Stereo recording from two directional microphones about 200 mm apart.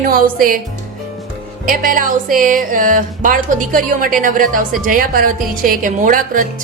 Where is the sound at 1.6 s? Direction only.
45° right (ahead or behind).